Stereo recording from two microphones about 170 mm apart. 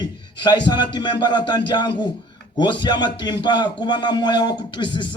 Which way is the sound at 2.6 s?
25° left (ahead or behind).